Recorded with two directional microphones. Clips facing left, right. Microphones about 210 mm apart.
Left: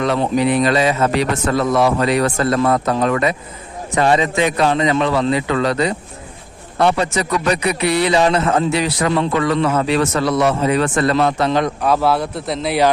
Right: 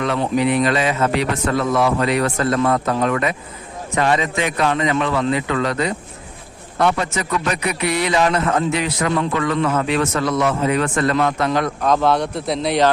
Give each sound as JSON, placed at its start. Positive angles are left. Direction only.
{"t": 0.0, "sound": "a man's voice", "side_deg": 35}
{"t": 11.8, "sound": "a man's voice", "side_deg": 5}